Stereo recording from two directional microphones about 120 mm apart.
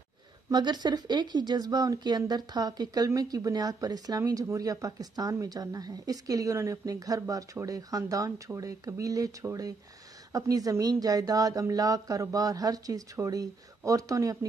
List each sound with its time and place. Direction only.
0.5 s speech: 35° right (ahead or behind)